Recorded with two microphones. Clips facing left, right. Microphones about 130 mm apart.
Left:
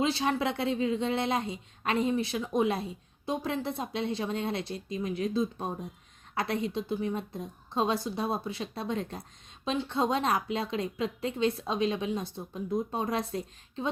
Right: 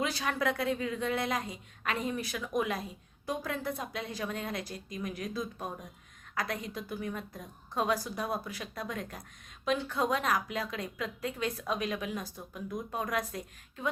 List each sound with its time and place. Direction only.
0.0 s a woman's voice: 25° left (ahead or behind)